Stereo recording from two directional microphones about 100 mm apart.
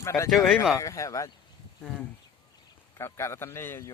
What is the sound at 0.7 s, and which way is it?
Speech, 30° left (ahead or behind).